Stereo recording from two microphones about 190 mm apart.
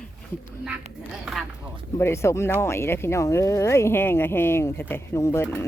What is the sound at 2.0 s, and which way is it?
Speech, 15° left (ahead or behind).